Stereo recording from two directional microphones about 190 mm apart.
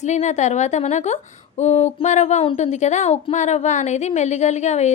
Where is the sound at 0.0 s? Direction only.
40° left (ahead or behind).